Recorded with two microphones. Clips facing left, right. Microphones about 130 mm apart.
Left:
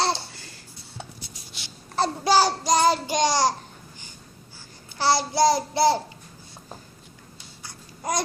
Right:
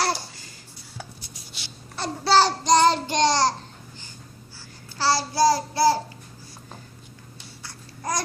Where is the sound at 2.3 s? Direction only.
10° left (ahead or behind).